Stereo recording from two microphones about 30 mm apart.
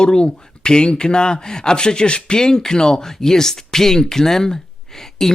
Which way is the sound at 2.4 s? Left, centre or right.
Left.